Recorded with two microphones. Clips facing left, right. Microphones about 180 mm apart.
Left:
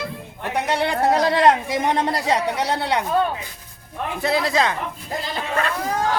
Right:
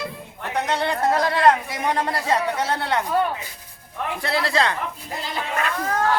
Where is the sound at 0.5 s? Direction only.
15° left (ahead or behind).